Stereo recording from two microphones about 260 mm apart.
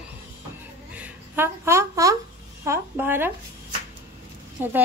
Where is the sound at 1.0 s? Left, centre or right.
Centre.